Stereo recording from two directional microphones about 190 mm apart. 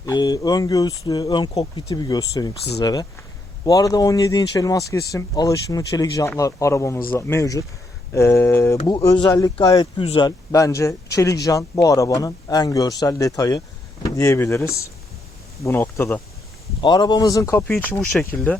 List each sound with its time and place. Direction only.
0.0 s speech: 20° left (ahead or behind)
8.8 s speech: 25° left (ahead or behind)
16.8 s speech: 20° left (ahead or behind)